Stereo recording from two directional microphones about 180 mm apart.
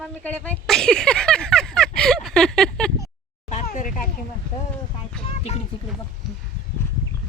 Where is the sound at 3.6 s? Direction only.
45° left (ahead or behind).